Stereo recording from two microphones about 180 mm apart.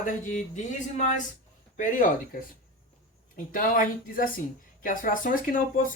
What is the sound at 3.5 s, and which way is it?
Speech, 50° left (ahead or behind).